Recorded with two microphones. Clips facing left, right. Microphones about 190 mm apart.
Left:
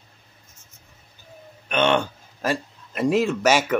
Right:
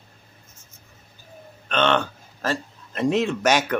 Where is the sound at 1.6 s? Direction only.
10° left (ahead or behind).